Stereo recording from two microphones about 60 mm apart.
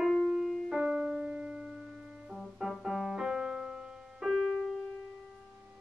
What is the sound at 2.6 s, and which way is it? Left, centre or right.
Music, centre.